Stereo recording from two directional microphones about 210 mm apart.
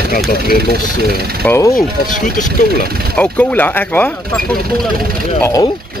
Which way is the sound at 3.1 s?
5° left (ahead or behind).